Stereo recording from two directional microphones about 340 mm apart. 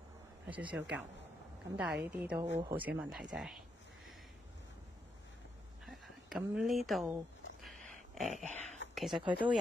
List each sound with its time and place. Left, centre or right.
0.5 s a woman's voice: centre
5.9 s speech: centre
8.1 s dog: centre
8.5 s a sound: centre
9.1 s speech: centre